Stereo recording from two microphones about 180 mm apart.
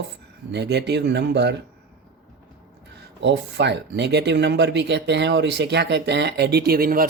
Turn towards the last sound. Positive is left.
turn(degrees=-55)  # may be behind; listen again after turning